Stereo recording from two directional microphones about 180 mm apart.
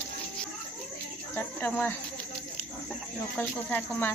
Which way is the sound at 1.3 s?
10° left (ahead or behind).